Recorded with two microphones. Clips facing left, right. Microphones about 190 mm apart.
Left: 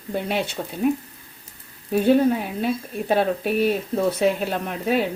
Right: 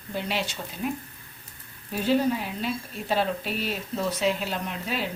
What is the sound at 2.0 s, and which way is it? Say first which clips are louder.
Speech: left 6 dB; 50° left (ahead or behind).